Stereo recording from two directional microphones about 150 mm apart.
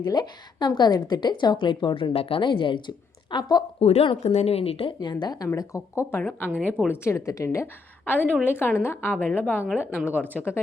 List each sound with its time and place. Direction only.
0.0 s a woman's voice: 30° left (ahead or behind)
3.8 s a woman's voice: 40° left (ahead or behind); by 10.6 s 10° left (ahead or behind)